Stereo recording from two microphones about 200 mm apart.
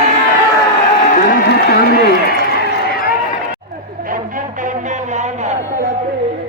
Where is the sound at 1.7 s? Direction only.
50° left (ahead or behind).